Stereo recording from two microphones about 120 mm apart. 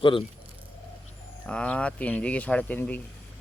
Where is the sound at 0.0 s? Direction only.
45° left (ahead or behind).